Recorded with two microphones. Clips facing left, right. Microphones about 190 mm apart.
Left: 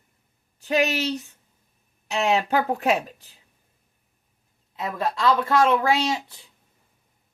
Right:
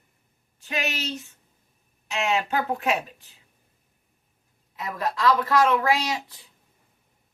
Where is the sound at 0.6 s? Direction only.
35° left (ahead or behind).